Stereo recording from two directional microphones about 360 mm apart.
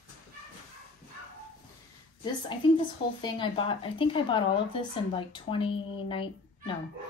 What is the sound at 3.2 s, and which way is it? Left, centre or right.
Speech, centre.